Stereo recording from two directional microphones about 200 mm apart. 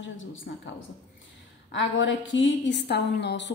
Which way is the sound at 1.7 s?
65° left (ahead or behind).